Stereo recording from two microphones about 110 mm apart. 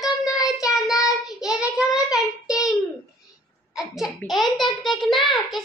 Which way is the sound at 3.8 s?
5° right (ahead or behind).